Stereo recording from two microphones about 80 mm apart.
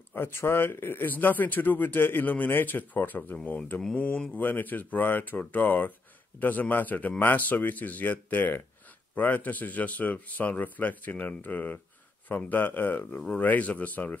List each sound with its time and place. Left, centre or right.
0.1 s a man's voice: left
13.0 s a man's voice: centre